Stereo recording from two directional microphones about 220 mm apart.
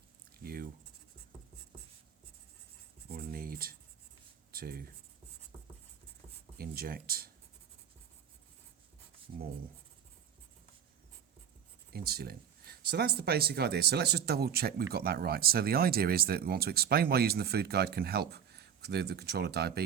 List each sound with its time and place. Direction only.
0.4 s scratch: 45° right (ahead or behind)
3.1 s a sound: 40° right (ahead or behind)
4.5 s speech: 40° right (ahead or behind)
6.6 s speech: 45° right (ahead or behind)
11.9 s speech: 45° right (ahead or behind)